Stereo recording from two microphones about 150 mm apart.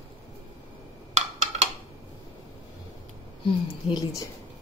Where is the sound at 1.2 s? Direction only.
50° right (ahead or behind).